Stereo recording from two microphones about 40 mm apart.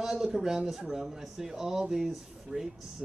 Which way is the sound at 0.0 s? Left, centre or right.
Centre.